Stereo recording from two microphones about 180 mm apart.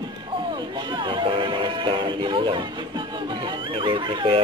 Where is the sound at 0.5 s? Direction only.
25° right (ahead or behind).